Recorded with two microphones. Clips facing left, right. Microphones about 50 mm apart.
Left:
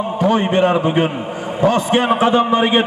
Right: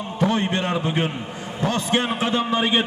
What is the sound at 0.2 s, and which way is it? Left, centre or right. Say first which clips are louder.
A man's voice: left 7 dB; left.